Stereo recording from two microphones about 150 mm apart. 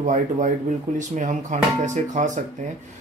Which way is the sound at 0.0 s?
55° right (ahead or behind).